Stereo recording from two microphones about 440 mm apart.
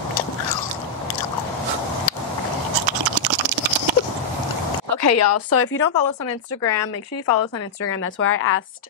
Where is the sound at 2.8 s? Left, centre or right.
Right.